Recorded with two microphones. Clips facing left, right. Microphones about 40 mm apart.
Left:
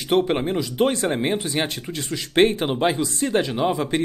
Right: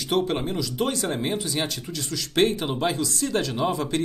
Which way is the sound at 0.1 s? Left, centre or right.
Left.